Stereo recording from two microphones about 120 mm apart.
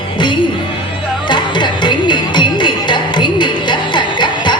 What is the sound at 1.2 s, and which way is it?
Music, 40° left (ahead or behind).